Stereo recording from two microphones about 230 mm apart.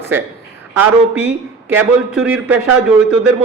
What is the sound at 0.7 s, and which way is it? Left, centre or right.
A man's voice, centre.